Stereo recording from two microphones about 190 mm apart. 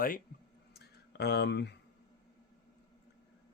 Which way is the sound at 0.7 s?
60° left (ahead or behind).